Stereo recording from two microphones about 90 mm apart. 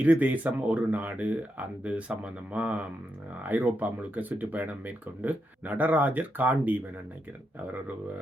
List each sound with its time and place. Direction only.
0.0 s speech: 15° right (ahead or behind)